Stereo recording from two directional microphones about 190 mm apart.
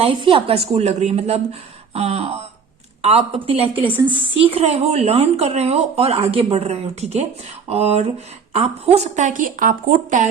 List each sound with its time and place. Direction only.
0.0 s speech: 25° right (ahead or behind); by 10.2 s 45° right (ahead or behind)